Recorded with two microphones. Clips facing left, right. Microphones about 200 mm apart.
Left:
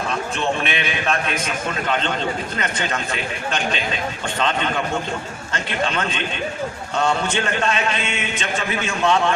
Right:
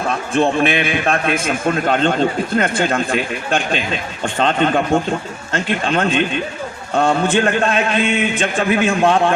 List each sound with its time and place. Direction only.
0.1 s a man's voice: 50° right (ahead or behind)